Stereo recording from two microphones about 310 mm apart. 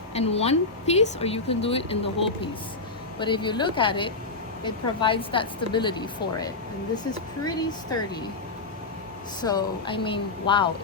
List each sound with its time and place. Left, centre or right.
0.1 s a woman's voice: centre
3.2 s a woman's voice: centre
9.4 s a woman's voice: centre